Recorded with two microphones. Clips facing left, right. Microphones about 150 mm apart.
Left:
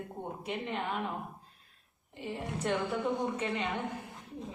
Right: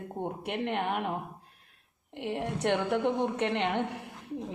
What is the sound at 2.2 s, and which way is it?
A woman's voice, 70° right (ahead or behind).